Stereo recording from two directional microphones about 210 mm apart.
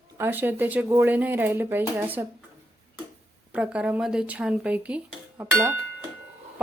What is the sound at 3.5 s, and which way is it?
Speech, 5° right (ahead or behind).